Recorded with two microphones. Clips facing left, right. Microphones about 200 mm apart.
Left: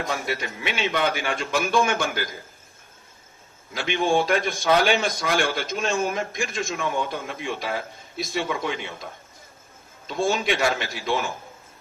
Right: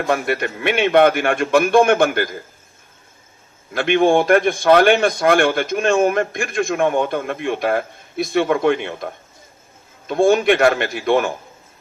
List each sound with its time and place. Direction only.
0.3 s a man's voice: 55° right (ahead or behind)
3.8 s a man's voice: 55° right (ahead or behind)
10.1 s a man's voice: 55° right (ahead or behind)